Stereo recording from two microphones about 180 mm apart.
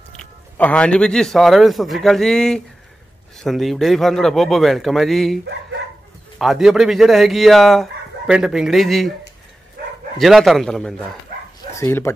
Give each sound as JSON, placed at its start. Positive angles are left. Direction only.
{"t": 0.2, "sound": "speech", "side_deg": 5}
{"t": 10.1, "sound": "speech", "side_deg": 0}
{"t": 11.7, "sound": "speech", "side_deg": 15}